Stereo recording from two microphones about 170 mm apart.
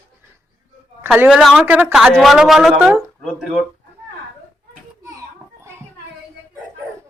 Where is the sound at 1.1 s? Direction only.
10° right (ahead or behind).